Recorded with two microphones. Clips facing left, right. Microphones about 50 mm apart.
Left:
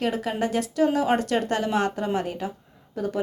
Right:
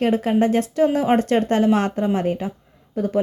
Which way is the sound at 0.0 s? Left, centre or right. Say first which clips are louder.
Right 7 dB; right.